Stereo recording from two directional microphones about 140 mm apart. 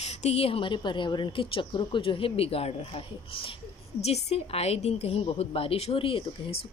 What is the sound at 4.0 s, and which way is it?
A woman's voice, 50° left (ahead or behind).